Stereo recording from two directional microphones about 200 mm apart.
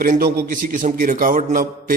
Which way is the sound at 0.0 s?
45° right (ahead or behind).